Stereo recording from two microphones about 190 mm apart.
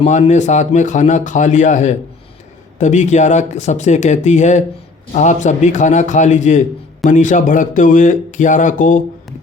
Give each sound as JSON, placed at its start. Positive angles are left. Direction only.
{"t": 0.0, "sound": "a man's voice", "side_deg": 35}